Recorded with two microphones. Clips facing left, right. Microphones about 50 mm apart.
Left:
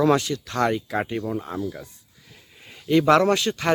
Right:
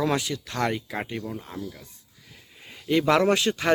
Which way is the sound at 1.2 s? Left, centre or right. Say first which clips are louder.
Left 7 dB; left.